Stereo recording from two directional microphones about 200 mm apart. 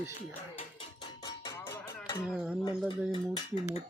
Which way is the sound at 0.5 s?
25° left (ahead or behind).